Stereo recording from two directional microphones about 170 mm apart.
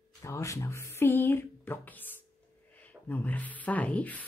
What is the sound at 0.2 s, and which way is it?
Speech, 20° left (ahead or behind).